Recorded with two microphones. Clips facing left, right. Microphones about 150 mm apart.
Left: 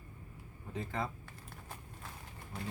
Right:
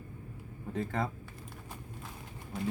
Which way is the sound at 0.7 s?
50° right (ahead or behind).